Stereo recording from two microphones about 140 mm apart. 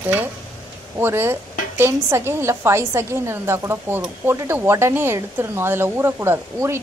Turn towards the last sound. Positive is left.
turn(degrees=-20)  # may be behind; listen again after turning